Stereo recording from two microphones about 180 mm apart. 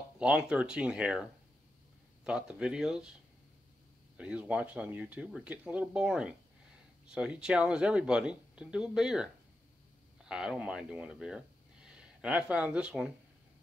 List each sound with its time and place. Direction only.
0.2 s speech: 5° right (ahead or behind)
2.2 s speech: 5° right (ahead or behind)
4.2 s speech: 5° right (ahead or behind)